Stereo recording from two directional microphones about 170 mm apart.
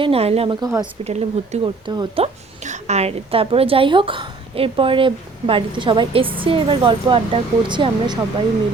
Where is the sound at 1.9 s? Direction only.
25° right (ahead or behind).